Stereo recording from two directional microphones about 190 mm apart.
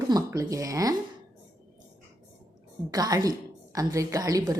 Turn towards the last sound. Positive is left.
turn(degrees=-20)  # may be behind; listen again after turning